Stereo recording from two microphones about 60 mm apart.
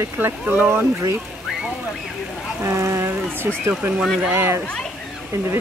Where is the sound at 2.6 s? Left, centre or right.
Right.